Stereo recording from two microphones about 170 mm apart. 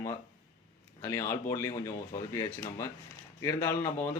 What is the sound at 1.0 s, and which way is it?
A man's voice, 15° left (ahead or behind).